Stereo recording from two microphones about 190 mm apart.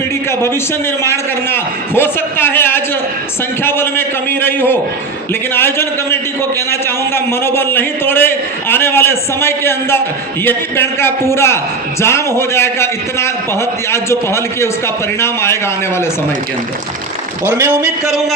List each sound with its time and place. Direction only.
1.0 s a man's voice: 10° left (ahead or behind)
17.5 s a man's voice: 10° right (ahead or behind)